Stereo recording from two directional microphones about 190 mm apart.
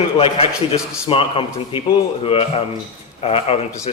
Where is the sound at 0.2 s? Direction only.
30° left (ahead or behind).